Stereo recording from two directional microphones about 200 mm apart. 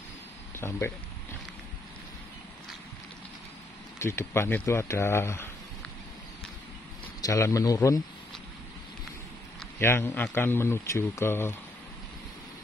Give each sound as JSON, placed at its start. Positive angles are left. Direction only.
{"t": 0.6, "sound": "speech", "side_deg": 10}
{"t": 4.0, "sound": "speech", "side_deg": 10}
{"t": 7.2, "sound": "speech", "side_deg": 15}
{"t": 9.8, "sound": "speech", "side_deg": 10}